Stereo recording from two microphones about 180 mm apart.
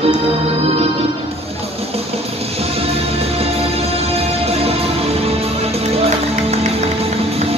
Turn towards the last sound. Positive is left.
turn(degrees=-35)  # may be behind; listen again after turning